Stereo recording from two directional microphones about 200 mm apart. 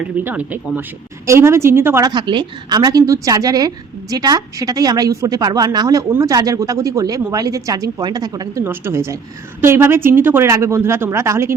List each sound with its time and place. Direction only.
0.3 s a woman's voice: 10° right (ahead or behind)